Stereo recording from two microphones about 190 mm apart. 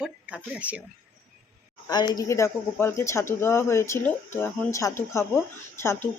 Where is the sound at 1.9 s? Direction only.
20° left (ahead or behind).